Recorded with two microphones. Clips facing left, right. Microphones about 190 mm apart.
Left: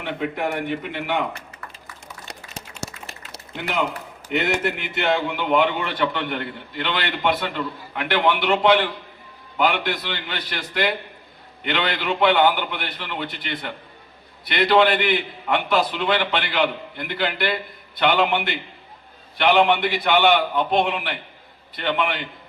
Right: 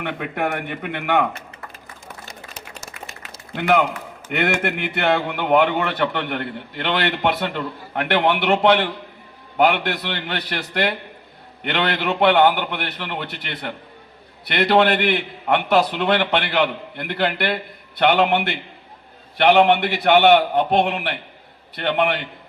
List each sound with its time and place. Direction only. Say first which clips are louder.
0.0 s a man's voice: right 1 dB; 55° right (ahead or behind)
3.5 s a man's voice: right 7 dB; 60° right (ahead or behind)